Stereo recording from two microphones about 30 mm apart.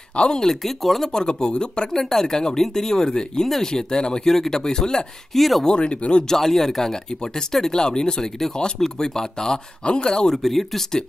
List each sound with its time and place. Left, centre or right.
0.3 s speech: centre
0.6 s speech: centre
1.1 s speech: left
1.9 s speech: centre
4.2 s speech: centre
5.3 s speech: centre
5.7 s speech: left
6.2 s speech: centre
9.8 s speech: left
10.3 s speech: centre